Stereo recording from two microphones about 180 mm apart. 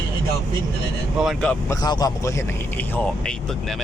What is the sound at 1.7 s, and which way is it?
Speech, 20° left (ahead or behind).